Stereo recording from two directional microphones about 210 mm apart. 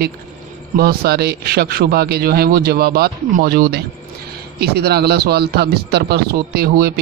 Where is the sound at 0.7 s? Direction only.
50° right (ahead or behind).